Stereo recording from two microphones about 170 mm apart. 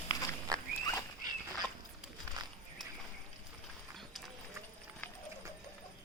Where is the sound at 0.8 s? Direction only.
20° left (ahead or behind).